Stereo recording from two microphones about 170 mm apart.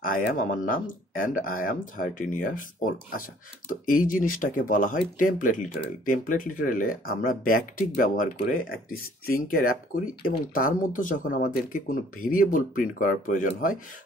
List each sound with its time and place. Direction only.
0.0 s speech: 55° left (ahead or behind)